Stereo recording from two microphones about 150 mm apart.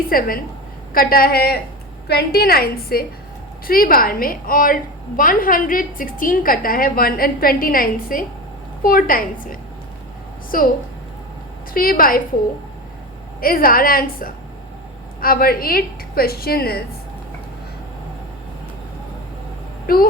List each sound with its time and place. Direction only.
0.1 s a woman's voice: 70° left (ahead or behind)
0.9 s a woman's voice: 85° left
3.7 s a woman's voice: 75° left (ahead or behind)
11.7 s a woman's voice: 75° left (ahead or behind)
13.4 s a woman's voice: 75° left (ahead or behind); by 16.8 s 90° left